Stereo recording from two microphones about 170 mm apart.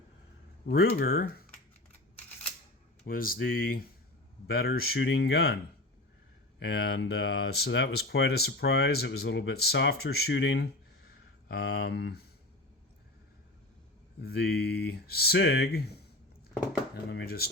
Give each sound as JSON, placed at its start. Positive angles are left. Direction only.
{"t": 0.6, "sound": "speech", "side_deg": 60}
{"t": 3.1, "sound": "speech", "side_deg": 60}
{"t": 6.6, "sound": "speech", "side_deg": 80}
{"t": 11.4, "sound": "speech", "side_deg": 70}
{"t": 14.2, "sound": "speech", "side_deg": 70}
{"t": 17.1, "sound": "speech", "side_deg": 70}